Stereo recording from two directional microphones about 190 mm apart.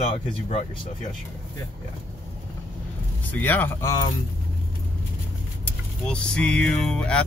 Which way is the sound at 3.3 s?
10° left (ahead or behind).